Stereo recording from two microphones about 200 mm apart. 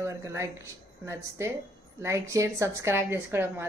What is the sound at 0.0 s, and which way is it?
A woman's voice, 15° right (ahead or behind).